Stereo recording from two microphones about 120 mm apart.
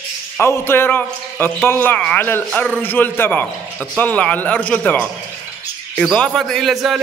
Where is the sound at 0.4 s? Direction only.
20° left (ahead or behind).